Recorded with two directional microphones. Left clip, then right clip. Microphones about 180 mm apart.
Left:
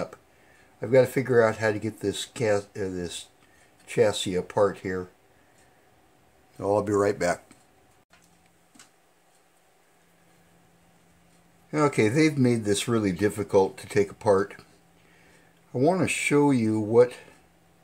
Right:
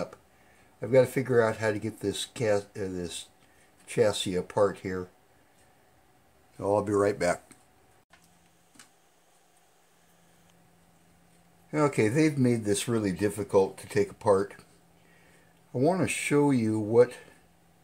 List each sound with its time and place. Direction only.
0.7 s speech: 10° left (ahead or behind)
6.6 s speech: centre (ahead or behind)
11.7 s speech: 5° left (ahead or behind)
15.7 s speech: 5° left (ahead or behind)